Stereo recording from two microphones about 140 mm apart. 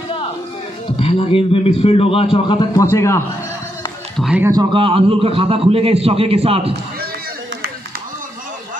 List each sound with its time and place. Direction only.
0.9 s a man's voice: 40° left (ahead or behind)
2.8 s a man's voice: 20° left (ahead or behind)
4.2 s speech: 5° left (ahead or behind)
4.7 s a man's voice: 40° right (ahead or behind)